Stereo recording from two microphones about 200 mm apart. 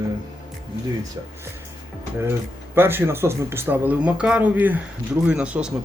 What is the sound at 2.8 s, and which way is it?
Speech, 10° right (ahead or behind).